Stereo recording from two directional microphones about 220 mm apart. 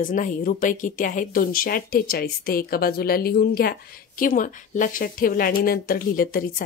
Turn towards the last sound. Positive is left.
turn(degrees=40)  # may be behind; listen again after turning